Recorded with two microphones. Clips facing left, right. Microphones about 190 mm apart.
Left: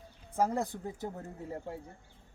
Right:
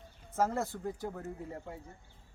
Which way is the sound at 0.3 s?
15° left (ahead or behind).